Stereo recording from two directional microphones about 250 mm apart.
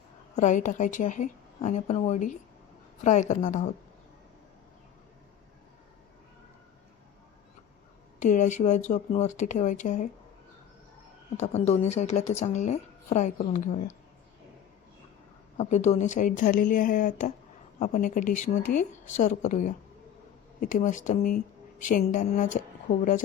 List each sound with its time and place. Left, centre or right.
0.3 s a woman's voice: left
8.2 s a woman's voice: left
11.3 s a woman's voice: left
15.5 s speech: left